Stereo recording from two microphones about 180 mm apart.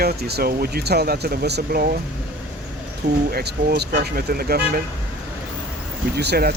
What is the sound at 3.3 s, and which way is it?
Speech, 60° right (ahead or behind).